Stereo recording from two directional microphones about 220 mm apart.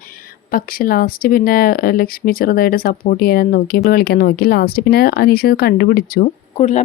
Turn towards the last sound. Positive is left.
turn(degrees=30)  # may be behind; listen again after turning